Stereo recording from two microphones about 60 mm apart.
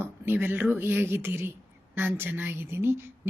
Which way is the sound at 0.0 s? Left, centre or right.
Right.